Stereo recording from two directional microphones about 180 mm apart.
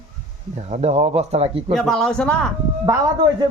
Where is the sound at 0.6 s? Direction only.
40° right (ahead or behind).